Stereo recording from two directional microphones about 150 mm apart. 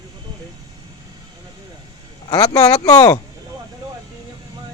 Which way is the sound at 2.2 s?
25° left (ahead or behind).